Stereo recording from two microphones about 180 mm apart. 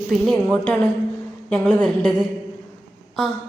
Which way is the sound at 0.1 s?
Centre (ahead or behind).